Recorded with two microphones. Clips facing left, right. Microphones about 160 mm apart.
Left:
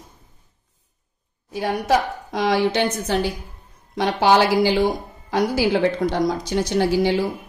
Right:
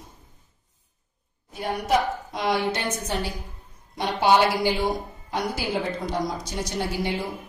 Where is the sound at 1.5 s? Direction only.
90° left.